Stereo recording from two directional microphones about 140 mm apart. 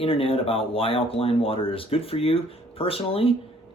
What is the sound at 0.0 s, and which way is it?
Speech, 40° left (ahead or behind).